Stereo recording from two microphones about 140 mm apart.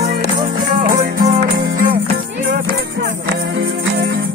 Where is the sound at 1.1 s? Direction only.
55° right (ahead or behind).